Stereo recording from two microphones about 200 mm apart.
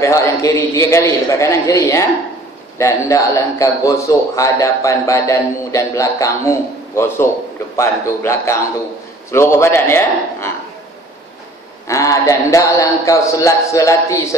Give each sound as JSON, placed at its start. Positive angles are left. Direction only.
{"t": 0.0, "sound": "a man's voice", "side_deg": 15}
{"t": 11.9, "sound": "a man's voice", "side_deg": 15}